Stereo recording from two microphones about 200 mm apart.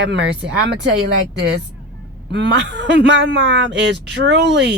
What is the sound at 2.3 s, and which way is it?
Speech, 60° right (ahead or behind).